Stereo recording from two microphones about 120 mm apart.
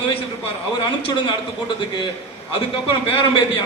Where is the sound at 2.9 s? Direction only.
45° left (ahead or behind).